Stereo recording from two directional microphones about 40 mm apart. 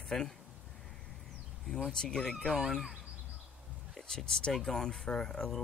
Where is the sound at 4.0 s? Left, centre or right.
Centre.